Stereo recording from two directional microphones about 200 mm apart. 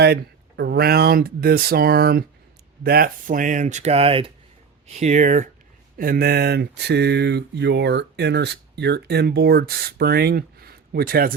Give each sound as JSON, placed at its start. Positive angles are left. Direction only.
{"t": 0.0, "sound": "speech", "side_deg": -55}
{"t": 6.0, "sound": "speech", "side_deg": -50}